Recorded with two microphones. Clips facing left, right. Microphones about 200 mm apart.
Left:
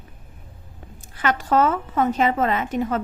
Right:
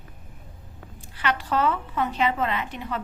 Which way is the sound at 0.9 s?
45° left (ahead or behind).